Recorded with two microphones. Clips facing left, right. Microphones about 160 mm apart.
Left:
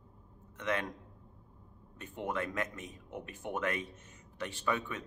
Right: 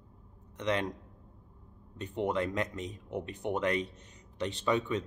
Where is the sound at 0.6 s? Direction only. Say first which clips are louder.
Right 4 dB; 20° right (ahead or behind).